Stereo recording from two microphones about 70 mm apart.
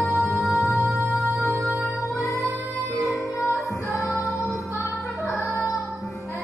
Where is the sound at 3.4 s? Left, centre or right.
Centre.